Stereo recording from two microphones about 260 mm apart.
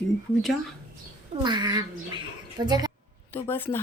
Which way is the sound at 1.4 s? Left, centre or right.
Centre.